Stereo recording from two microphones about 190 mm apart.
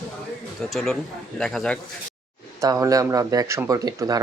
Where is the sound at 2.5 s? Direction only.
15° right (ahead or behind).